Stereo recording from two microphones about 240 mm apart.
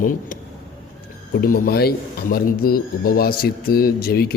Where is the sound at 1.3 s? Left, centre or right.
Left.